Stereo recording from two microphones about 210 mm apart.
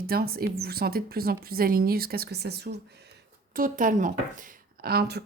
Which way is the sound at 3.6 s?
40° right (ahead or behind).